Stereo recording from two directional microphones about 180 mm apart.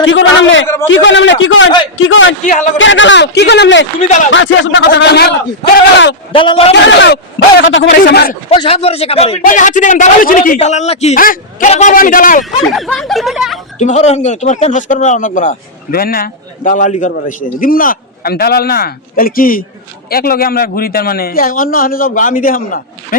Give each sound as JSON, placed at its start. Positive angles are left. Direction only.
{"t": 0.0, "sound": "speech", "side_deg": 90}
{"t": 2.4, "sound": "speech", "side_deg": 45}
{"t": 2.7, "sound": "a man's voice", "side_deg": 90}
{"t": 6.3, "sound": "a man's voice", "side_deg": 30}
{"t": 6.8, "sound": "a man's voice", "side_deg": 75}
{"t": 7.6, "sound": "a man's voice", "side_deg": 90}
{"t": 8.4, "sound": "speech", "side_deg": 30}
{"t": 9.4, "sound": "speech", "side_deg": 45}
{"t": 11.2, "sound": "speech", "side_deg": 50}
{"t": 12.7, "sound": "speech", "side_deg": 0}
{"t": 13.7, "sound": "a man's voice", "side_deg": 40}